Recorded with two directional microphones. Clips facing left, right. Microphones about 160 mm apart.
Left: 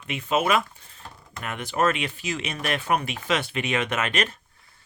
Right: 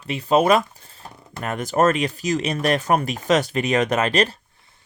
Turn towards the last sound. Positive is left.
turn(degrees=-35)  # may be behind; listen again after turning